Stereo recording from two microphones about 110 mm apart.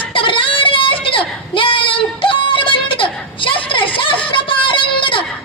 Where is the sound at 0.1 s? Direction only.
50° left (ahead or behind).